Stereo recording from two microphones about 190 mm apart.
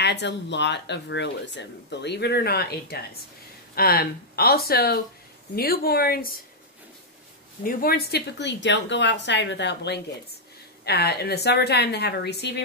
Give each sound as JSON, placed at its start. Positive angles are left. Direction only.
{"t": 0.0, "sound": "speech", "side_deg": 65}
{"t": 7.6, "sound": "speech", "side_deg": 50}